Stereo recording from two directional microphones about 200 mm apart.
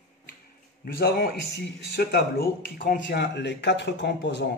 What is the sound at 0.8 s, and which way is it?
Speech, 50° left (ahead or behind).